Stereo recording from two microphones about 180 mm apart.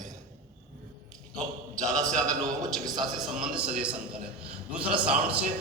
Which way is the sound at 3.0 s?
5° right (ahead or behind).